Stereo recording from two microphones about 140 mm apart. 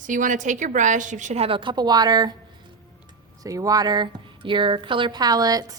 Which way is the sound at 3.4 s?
25° right (ahead or behind).